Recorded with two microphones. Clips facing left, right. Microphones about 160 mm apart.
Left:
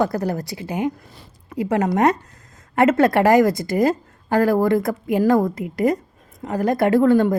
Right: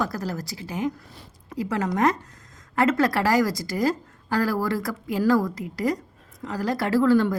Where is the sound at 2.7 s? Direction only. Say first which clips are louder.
Left 6 dB; 60° left (ahead or behind).